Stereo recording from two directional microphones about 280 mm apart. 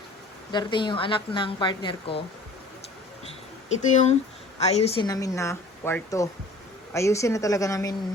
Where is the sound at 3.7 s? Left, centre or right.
Left.